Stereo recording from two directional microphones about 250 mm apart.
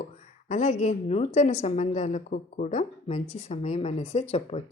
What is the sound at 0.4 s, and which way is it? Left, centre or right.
A woman's voice, left.